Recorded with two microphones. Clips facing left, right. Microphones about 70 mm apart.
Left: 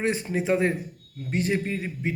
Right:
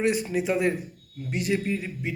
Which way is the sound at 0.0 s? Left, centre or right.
Left.